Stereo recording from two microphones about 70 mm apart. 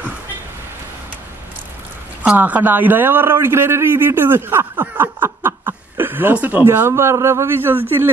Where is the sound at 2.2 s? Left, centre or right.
Right.